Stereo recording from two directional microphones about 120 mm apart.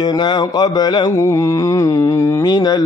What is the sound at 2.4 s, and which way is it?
Mantra, 35° left (ahead or behind).